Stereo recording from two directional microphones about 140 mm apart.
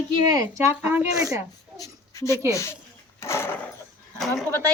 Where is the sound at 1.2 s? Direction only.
25° right (ahead or behind).